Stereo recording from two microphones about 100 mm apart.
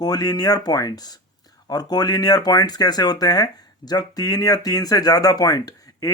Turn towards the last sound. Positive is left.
turn(degrees=35)  # may be behind; listen again after turning